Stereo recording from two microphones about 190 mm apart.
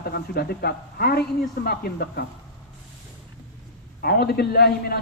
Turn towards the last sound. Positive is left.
turn(degrees=55)  # may be behind; listen again after turning